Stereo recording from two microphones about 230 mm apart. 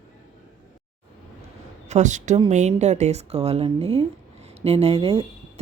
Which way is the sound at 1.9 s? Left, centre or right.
Right.